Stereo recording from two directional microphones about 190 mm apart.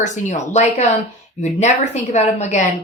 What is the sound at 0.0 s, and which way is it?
A woman's voice, 40° left (ahead or behind).